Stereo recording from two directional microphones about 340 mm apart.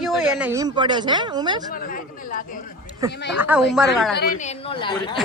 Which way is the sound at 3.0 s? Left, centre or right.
Centre.